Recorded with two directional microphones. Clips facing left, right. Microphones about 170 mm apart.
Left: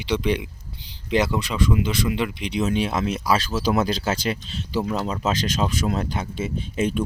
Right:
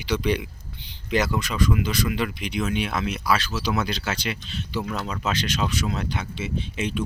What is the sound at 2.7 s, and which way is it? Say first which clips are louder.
Speech: left 3 dB; 35° left (ahead or behind).